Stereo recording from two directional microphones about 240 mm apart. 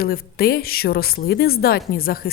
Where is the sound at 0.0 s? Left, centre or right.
Left.